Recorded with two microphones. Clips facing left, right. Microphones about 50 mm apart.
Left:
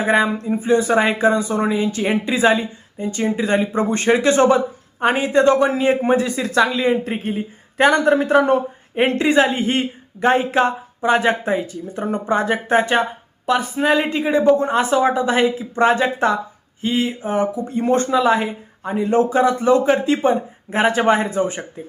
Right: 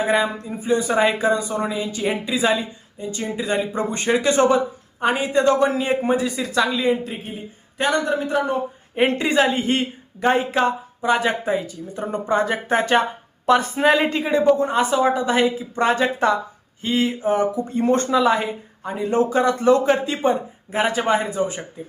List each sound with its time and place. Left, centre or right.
0.0 s speech: left
0.9 s speech: centre
2.3 s speech: left
7.0 s speech: left
7.8 s speech: left
9.2 s a woman's voice: centre
11.0 s speech: left
12.9 s speech: centre
13.7 s speech: centre
14.2 s a woman's voice: centre
14.5 s a woman's voice: left; by 19.1 s centre
19.1 s speech: left
19.4 s a woman's voice: centre
20.7 s speech: left